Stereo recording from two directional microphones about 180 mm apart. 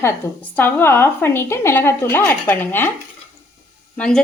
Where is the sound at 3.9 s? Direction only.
5° left (ahead or behind).